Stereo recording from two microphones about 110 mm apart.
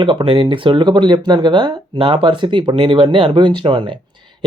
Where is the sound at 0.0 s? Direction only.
45° right (ahead or behind).